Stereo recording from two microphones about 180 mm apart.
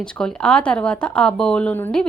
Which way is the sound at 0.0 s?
5° left (ahead or behind).